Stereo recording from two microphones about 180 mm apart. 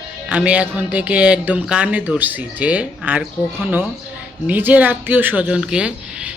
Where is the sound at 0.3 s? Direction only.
5° right (ahead or behind).